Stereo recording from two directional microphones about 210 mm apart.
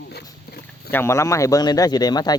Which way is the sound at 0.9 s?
10° left (ahead or behind).